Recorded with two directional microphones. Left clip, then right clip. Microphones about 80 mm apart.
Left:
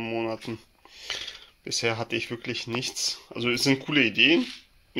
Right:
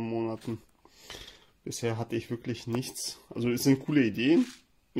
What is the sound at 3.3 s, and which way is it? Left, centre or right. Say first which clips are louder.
Speech: left 3 dB; centre.